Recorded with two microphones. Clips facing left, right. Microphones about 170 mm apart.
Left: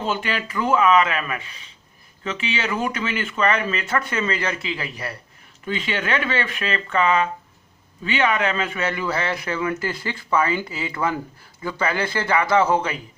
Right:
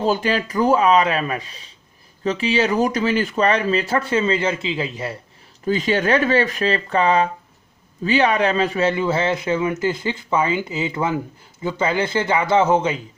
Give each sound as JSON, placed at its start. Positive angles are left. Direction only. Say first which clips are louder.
{"t": 0.0, "sound": "speech", "louder": "right 6 dB", "side_deg": -35}
{"t": 5.6, "sound": "speech", "louder": "right 7 dB", "side_deg": -35}